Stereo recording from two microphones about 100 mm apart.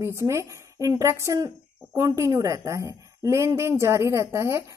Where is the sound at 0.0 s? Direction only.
30° right (ahead or behind).